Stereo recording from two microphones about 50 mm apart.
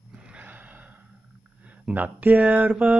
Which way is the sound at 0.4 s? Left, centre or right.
Right.